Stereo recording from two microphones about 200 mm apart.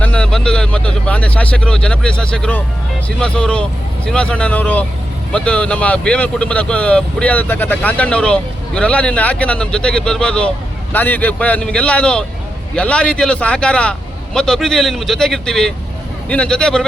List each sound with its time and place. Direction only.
0.0 s speech: 5° left (ahead or behind)